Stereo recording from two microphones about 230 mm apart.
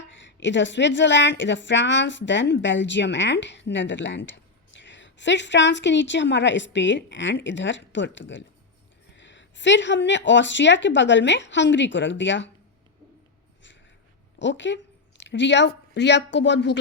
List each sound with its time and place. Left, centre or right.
0.0 s a woman's voice: left
14.3 s a woman's voice: left